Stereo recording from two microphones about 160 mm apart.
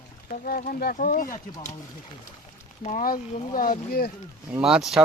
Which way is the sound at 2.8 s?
55° left (ahead or behind).